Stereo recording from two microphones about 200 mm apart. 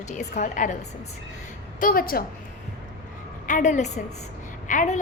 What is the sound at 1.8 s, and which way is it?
Speech, 45° left (ahead or behind).